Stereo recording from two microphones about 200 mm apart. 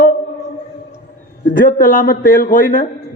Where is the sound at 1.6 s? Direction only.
45° left (ahead or behind).